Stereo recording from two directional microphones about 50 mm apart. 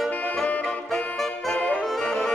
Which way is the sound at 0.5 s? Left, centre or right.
Left.